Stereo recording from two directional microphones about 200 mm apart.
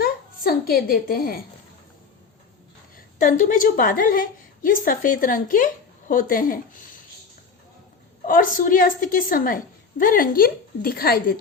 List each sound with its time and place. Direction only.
0.0 s a sound: 50° left (ahead or behind)
2.9 s a woman's voice: 40° left (ahead or behind)
8.3 s a woman's voice: 45° left (ahead or behind)